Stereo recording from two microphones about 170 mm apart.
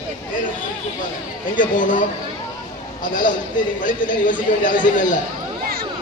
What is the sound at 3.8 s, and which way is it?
Speech, 50° left (ahead or behind).